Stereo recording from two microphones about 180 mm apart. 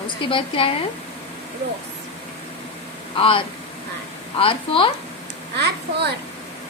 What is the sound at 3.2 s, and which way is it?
A woman's voice, 30° left (ahead or behind).